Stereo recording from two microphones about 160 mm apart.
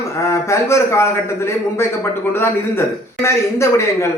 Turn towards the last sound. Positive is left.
turn(degrees=15)  # may be behind; listen again after turning